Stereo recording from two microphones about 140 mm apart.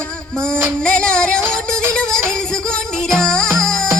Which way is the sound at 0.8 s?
5° left (ahead or behind).